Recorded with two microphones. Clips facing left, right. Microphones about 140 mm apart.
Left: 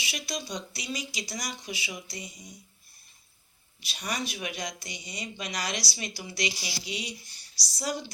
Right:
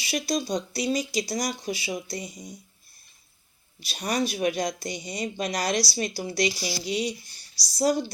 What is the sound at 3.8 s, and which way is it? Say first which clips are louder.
Speech: right 7 dB; 40° right (ahead or behind).